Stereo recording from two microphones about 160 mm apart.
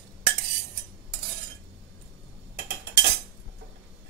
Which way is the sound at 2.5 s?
90° right.